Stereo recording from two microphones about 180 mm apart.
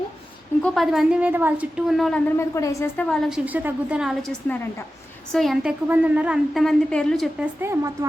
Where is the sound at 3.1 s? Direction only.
5° right (ahead or behind).